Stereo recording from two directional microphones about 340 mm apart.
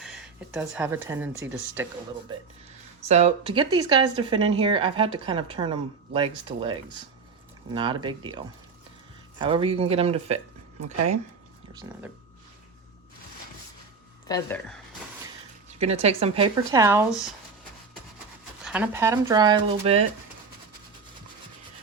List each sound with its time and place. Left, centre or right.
0.0 s a woman's voice: centre
3.1 s a woman's voice: centre
14.3 s speech: centre
15.8 s a woman's voice: centre
18.6 s a woman's voice: centre